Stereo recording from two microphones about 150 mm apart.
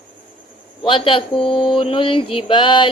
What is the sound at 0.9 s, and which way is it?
A woman's voice, 35° left (ahead or behind).